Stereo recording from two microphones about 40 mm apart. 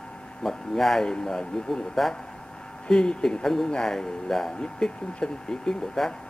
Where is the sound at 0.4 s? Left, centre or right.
Centre.